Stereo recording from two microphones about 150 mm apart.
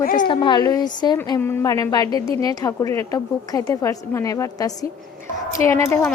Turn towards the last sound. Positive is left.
turn(degrees=15)  # may be behind; listen again after turning